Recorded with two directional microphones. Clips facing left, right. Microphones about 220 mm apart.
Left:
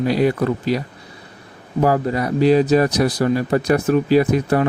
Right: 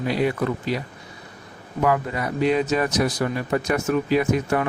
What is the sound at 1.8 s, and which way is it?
Speech, 35° left (ahead or behind).